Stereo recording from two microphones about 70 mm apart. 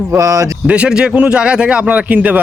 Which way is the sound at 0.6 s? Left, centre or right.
Centre.